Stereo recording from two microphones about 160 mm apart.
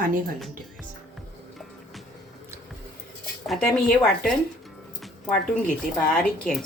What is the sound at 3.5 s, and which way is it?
Speech, centre (ahead or behind).